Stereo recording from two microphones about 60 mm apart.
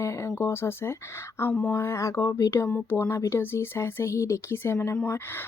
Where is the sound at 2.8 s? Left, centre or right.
Left.